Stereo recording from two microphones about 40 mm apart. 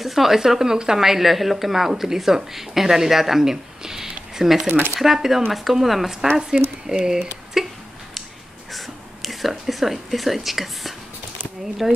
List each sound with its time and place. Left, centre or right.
0.0 s a woman's voice: centre
6.5 s a woman's voice: centre
7.6 s hiccup: centre
8.7 s a woman's voice: centre